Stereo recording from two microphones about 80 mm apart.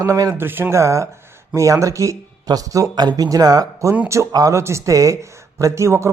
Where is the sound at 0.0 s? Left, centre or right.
Right.